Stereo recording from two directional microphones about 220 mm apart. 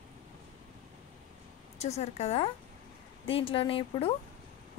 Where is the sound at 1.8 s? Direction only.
30° left (ahead or behind).